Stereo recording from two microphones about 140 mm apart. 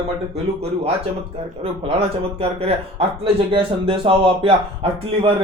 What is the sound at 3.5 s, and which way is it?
Speech, 40° right (ahead or behind).